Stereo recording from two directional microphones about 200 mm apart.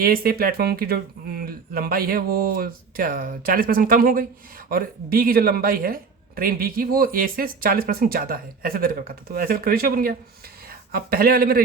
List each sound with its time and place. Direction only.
0.0 s speech: 45° right (ahead or behind)